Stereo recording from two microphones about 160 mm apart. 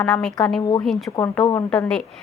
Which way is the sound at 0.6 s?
25° left (ahead or behind).